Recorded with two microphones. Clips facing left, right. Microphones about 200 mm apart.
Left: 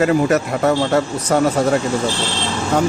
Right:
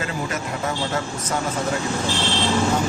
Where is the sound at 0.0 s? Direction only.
70° left (ahead or behind).